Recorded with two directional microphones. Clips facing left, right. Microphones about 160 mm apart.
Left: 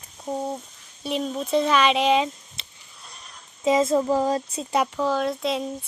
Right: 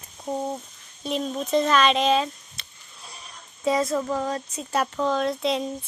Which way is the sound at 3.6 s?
20° left (ahead or behind).